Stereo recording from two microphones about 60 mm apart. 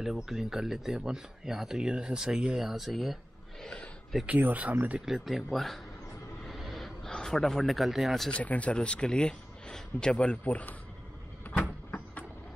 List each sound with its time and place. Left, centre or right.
0.0 s speech: centre
3.6 s speech: centre
4.4 s speech: right
5.0 s speech: centre
6.4 s music: centre
7.1 s speech: centre
8.3 s speech: left